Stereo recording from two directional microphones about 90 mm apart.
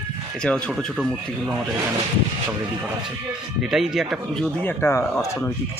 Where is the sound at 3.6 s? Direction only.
5° right (ahead or behind).